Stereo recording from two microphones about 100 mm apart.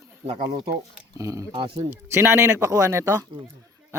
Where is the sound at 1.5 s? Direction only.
60° right (ahead or behind).